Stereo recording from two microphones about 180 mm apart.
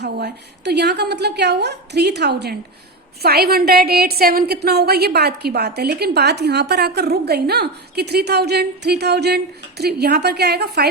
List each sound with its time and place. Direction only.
0.0 s a woman's voice: 70° right (ahead or behind)